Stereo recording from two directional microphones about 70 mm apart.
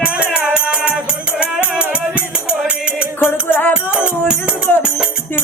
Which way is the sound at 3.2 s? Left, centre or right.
Left.